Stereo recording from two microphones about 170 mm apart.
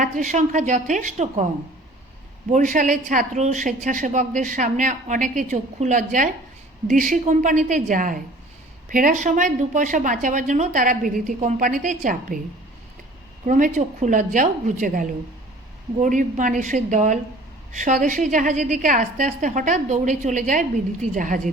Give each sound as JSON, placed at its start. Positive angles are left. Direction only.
{"t": 0.0, "sound": "a woman's voice", "side_deg": -45}
{"t": 2.5, "sound": "a woman's voice", "side_deg": -50}
{"t": 13.4, "sound": "a woman's voice", "side_deg": -50}